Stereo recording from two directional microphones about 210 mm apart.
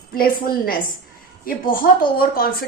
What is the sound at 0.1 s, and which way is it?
A woman's voice, 45° left (ahead or behind).